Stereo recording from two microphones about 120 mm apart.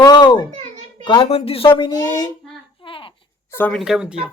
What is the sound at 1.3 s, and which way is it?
Speech, 55° left (ahead or behind).